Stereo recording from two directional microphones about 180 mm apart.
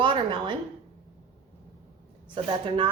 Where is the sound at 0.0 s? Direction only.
25° right (ahead or behind).